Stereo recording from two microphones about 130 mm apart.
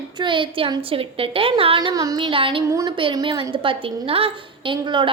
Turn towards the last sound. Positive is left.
turn(degrees=-40)  # may be behind; listen again after turning